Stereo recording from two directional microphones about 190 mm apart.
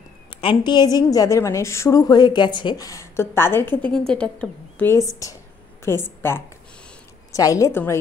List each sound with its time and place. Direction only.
0.3 s a woman's voice: 25° left (ahead or behind)